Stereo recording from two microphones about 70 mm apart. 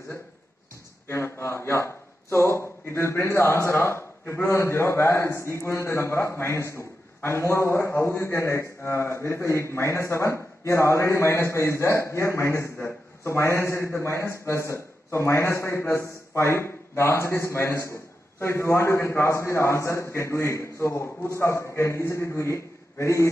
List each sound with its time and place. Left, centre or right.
1.0 s a man's voice: left